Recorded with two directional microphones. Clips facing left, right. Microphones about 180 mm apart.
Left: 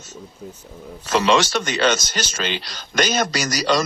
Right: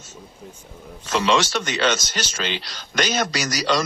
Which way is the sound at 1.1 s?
45° left (ahead or behind).